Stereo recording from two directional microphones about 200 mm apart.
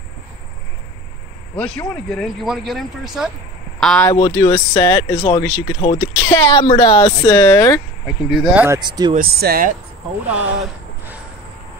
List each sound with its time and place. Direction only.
1.6 s speech: 5° left (ahead or behind)
4.1 s speech: 15° left (ahead or behind)
8.2 s speech: 5° right (ahead or behind)
8.6 s speech: 20° right (ahead or behind)
9.1 s speech: 50° right (ahead or behind)
10.2 s a sound: 5° right (ahead or behind)